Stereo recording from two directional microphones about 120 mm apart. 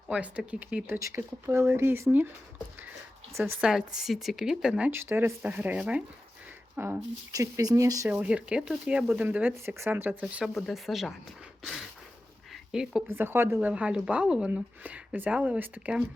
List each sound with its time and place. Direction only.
0.1 s speech: 10° right (ahead or behind)
0.9 s speech: 25° right (ahead or behind)
3.3 s speech: 20° right (ahead or behind)
3.6 s speech: 5° right (ahead or behind); by 8.1 s 25° right (ahead or behind)
8.1 s speech: 10° right (ahead or behind)
10.4 s speech: centre (ahead or behind)
11.6 s a sound: centre (ahead or behind)
12.7 s speech: 5° right (ahead or behind)
13.1 s speech: 20° right (ahead or behind)
13.7 s speech: 10° right (ahead or behind)